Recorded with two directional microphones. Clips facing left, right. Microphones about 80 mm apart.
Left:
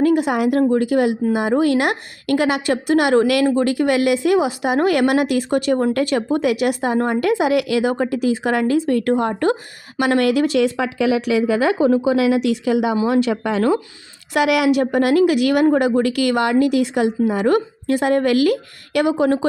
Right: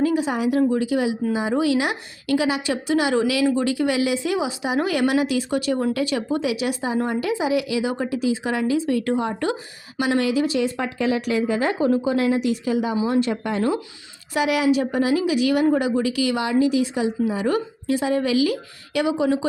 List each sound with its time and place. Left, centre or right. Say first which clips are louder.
0.0 s speech: left 5 dB; left
3.4 s speech: left 3 dB; left
13.1 s speech: left 4 dB; left
14.3 s speech: left 4 dB; left